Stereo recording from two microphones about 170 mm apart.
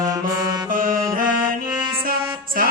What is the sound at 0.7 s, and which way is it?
Music, 55° right (ahead or behind).